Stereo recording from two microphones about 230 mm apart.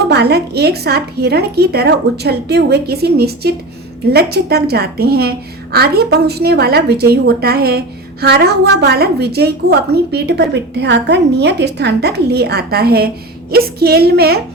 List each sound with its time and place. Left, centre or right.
0.1 s a woman's voice: right